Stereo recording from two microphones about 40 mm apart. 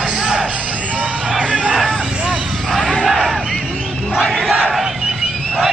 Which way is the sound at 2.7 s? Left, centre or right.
Centre.